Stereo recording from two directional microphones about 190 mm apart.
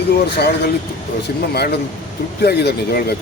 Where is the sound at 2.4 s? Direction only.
60° left (ahead or behind).